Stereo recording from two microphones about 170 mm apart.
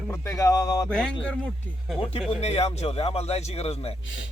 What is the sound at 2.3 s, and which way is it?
Speech, 40° left (ahead or behind).